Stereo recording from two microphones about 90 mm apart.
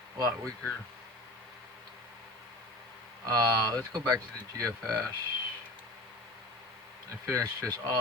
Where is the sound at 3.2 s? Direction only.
45° right (ahead or behind).